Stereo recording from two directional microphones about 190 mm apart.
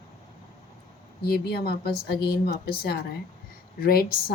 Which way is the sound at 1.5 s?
55° left (ahead or behind).